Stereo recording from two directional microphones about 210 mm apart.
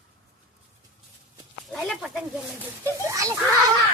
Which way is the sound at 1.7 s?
Centre (ahead or behind).